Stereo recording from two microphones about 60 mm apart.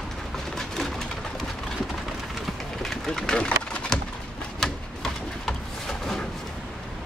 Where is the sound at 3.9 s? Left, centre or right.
Centre.